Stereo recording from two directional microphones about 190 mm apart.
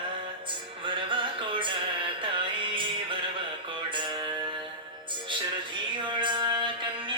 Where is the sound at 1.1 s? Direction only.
25° right (ahead or behind).